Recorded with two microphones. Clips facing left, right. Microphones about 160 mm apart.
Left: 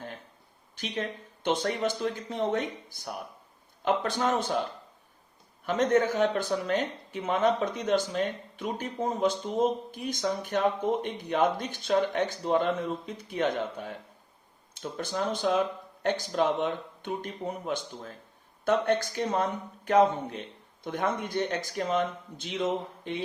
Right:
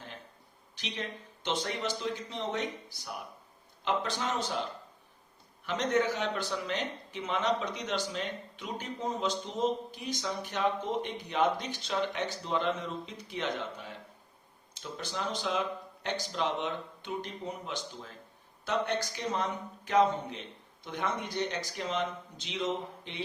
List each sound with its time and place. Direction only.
0.8 s speech: 50° left (ahead or behind)